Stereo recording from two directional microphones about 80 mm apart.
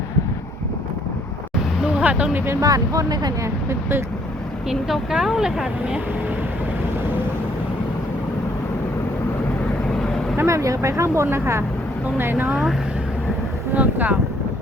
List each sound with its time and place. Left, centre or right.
1.8 s a sound: centre
2.6 s speech: right
3.4 s speech: right
4.7 s speech: centre
10.3 s speech: right
13.7 s speech: centre